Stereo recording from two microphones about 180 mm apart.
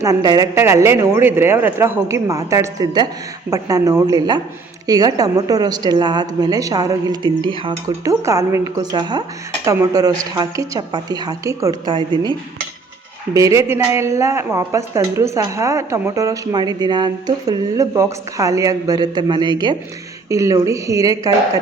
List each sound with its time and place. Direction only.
0.0 s a woman's voice: 20° right (ahead or behind)
8.2 s a woman's voice: 15° right (ahead or behind)
13.3 s a woman's voice: 15° right (ahead or behind)